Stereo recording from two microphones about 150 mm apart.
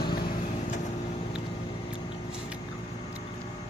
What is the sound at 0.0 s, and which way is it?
Vehicle, 90° left.